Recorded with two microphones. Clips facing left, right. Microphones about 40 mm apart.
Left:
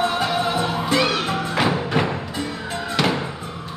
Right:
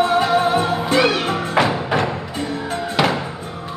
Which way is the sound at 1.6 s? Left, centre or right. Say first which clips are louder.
Right 4 dB; centre.